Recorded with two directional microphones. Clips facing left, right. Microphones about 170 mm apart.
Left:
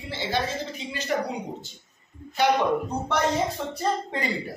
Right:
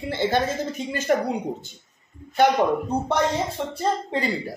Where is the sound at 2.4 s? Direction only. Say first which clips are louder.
Left 1 dB; 45° right (ahead or behind).